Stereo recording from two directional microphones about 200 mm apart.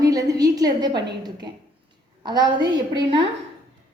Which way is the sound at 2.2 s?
20° right (ahead or behind).